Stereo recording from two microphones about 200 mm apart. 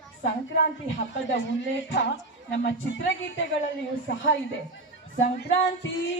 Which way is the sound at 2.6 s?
65° left (ahead or behind).